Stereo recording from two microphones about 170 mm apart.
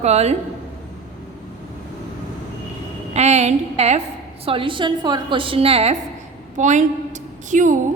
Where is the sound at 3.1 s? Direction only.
40° right (ahead or behind).